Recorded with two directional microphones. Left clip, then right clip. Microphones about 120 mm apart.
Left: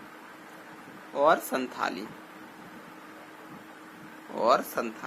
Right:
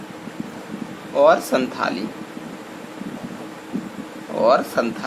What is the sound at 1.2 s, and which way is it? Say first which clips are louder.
Speech: right 9 dB; 40° left (ahead or behind).